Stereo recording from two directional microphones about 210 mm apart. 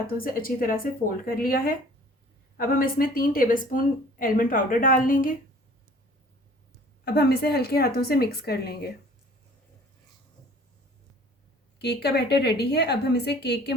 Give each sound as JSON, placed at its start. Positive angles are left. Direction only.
{"t": 0.2, "sound": "a woman's voice", "side_deg": 45}
{"t": 7.0, "sound": "a woman's voice", "side_deg": 50}
{"t": 11.8, "sound": "a woman's voice", "side_deg": 50}